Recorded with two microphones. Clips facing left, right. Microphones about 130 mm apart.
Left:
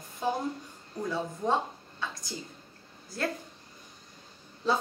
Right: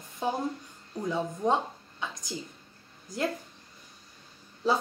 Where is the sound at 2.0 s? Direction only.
15° right (ahead or behind).